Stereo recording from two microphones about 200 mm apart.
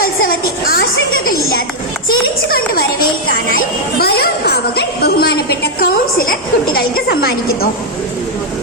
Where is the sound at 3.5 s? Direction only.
50° left (ahead or behind).